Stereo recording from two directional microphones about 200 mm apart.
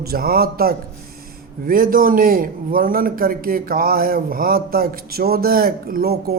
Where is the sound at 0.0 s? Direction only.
50° right (ahead or behind).